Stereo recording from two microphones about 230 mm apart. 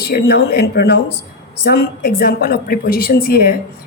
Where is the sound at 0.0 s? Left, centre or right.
Left.